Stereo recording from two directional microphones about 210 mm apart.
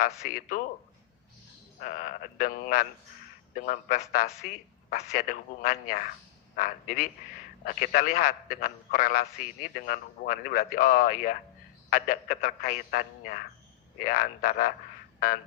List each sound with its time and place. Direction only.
0.3 s a man's voice: 40° left (ahead or behind)
1.8 s a man's voice: 40° left (ahead or behind)